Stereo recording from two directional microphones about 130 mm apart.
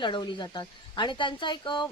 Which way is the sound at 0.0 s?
40° left (ahead or behind).